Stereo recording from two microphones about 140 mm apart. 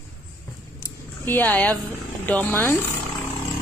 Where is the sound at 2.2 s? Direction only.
10° left (ahead or behind).